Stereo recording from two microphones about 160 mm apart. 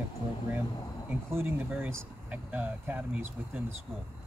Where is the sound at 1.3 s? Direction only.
15° right (ahead or behind).